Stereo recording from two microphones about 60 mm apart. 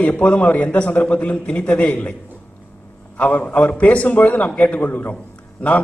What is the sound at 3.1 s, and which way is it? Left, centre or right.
A man's voice, left.